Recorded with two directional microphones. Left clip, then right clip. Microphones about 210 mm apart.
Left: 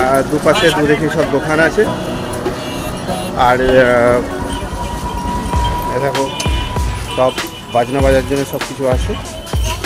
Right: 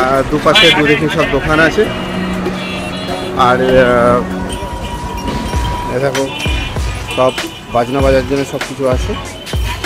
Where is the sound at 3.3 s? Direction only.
15° right (ahead or behind).